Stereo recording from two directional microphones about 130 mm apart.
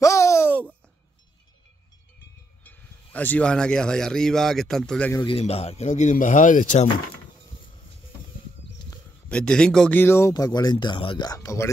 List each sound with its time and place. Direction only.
0.0 s a sound: 20° left (ahead or behind)
2.6 s speech: 15° left (ahead or behind)
5.4 s speech: 50° left (ahead or behind); by 6.9 s 75° left (ahead or behind)
9.3 s speech: 5° left (ahead or behind)
9.9 s speech: 20° left (ahead or behind); by 11.2 s 40° left (ahead or behind)
11.2 s speech: 25° left (ahead or behind)